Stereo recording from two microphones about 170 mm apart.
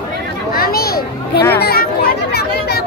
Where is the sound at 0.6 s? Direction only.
65° left (ahead or behind).